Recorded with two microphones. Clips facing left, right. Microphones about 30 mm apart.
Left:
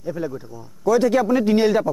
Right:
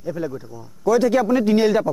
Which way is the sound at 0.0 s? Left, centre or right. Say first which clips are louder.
Even; centre.